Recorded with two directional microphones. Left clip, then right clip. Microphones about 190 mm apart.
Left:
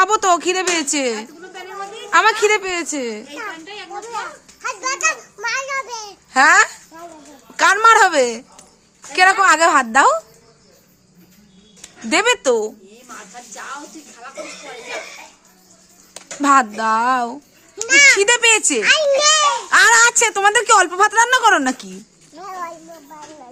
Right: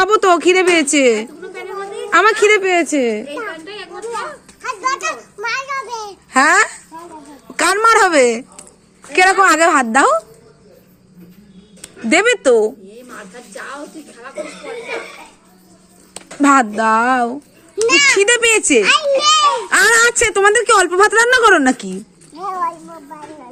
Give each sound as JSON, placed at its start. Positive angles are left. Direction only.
{"t": 0.0, "sound": "a woman's voice", "side_deg": 0}
{"t": 3.2, "sound": "children playing", "side_deg": 20}
{"t": 4.6, "sound": "children playing", "side_deg": 30}
{"t": 6.3, "sound": "a woman's voice", "side_deg": -15}
{"t": 12.0, "sound": "a woman's voice", "side_deg": -5}
{"t": 16.4, "sound": "a woman's voice", "side_deg": -5}
{"t": 17.8, "sound": "a child's voice", "side_deg": 10}
{"t": 18.2, "sound": "a woman's voice", "side_deg": 0}
{"t": 18.8, "sound": "a child's voice", "side_deg": 15}
{"t": 19.7, "sound": "a woman's voice", "side_deg": -5}
{"t": 22.4, "sound": "a child's voice", "side_deg": 15}